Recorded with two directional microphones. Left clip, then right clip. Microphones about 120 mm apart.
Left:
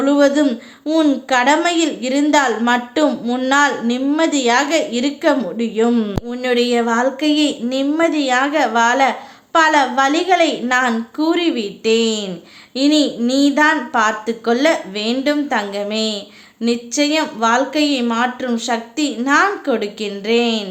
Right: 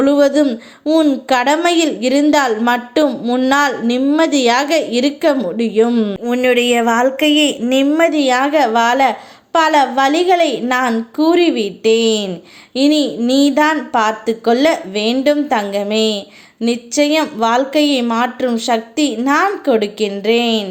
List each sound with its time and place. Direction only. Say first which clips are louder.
0.0 s a woman's voice: right 2 dB; 40° right (ahead or behind)
0.4 s speech: right 2 dB; 25° right (ahead or behind)
1.3 s a woman's voice: right 1 dB; 40° right (ahead or behind)
3.5 s a woman's voice: left 1 dB; 40° right (ahead or behind)
5.9 s a woman's voice: right 3 dB; 25° right (ahead or behind)